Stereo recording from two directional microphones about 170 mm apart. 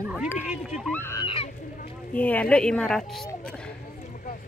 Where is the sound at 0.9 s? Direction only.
10° left (ahead or behind).